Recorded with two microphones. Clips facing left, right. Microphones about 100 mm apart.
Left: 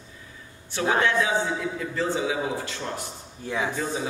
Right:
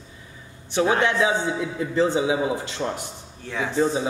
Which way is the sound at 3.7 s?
25° right (ahead or behind).